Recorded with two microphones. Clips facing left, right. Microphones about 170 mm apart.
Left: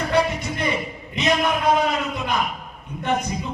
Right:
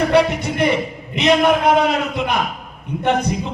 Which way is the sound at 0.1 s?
70° right (ahead or behind).